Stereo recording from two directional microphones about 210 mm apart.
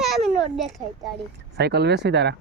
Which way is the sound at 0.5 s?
Centre (ahead or behind).